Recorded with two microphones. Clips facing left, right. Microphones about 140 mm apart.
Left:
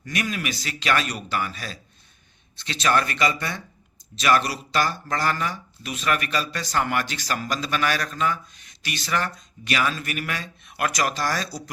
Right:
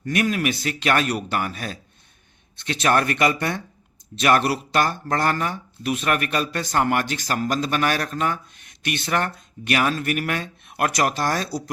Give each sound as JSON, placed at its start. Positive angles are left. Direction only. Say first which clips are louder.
{"t": 0.0, "sound": "speech", "louder": "right 6 dB", "side_deg": -55}